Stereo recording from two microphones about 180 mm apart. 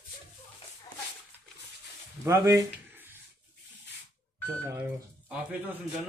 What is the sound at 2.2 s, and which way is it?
Speech, 15° right (ahead or behind).